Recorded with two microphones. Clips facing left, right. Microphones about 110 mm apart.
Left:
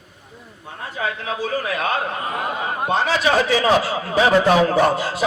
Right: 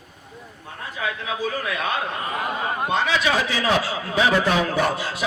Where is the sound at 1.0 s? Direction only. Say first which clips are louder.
Left 2 dB; 35° left (ahead or behind).